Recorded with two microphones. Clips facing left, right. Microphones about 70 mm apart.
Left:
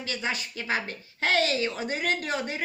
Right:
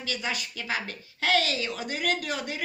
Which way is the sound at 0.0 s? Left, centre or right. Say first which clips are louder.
Left 1 dB; left.